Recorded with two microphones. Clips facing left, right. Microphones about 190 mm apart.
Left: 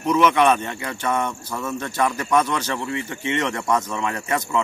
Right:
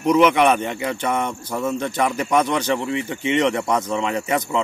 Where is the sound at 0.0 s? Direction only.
15° right (ahead or behind).